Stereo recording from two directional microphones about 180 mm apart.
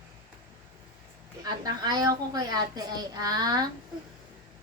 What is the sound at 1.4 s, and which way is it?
A woman's voice, 25° right (ahead or behind).